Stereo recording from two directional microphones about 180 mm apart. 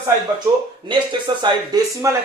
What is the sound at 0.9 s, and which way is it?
Speech, 25° right (ahead or behind).